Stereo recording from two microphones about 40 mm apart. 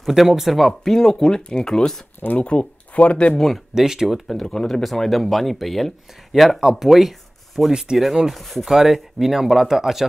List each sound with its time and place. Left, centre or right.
0.1 s speech: centre
2.3 s speech: left
3.3 s speech: centre
3.7 s speech: centre
4.3 s speech: centre
8.6 s speech: centre